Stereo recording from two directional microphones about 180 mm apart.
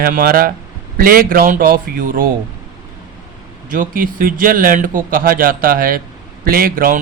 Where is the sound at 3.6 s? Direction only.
50° right (ahead or behind).